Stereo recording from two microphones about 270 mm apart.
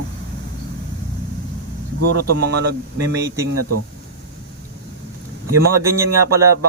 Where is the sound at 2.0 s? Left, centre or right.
Right.